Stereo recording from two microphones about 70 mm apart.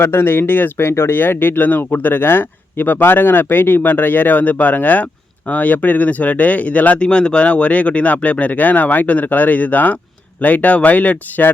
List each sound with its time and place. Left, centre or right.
0.0 s speech: left